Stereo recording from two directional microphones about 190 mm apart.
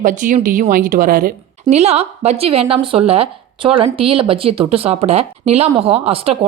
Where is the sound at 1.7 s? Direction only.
35° right (ahead or behind).